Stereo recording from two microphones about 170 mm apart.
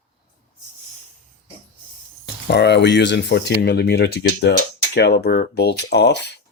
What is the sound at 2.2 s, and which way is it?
Speech, 85° left.